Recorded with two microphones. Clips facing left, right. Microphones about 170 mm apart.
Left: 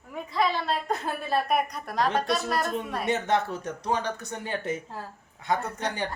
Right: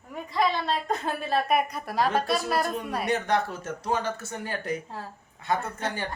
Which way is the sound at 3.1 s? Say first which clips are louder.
Left 1 dB; 25° left (ahead or behind).